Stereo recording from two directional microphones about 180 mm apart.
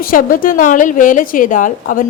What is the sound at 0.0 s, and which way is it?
A woman's voice, 50° left (ahead or behind).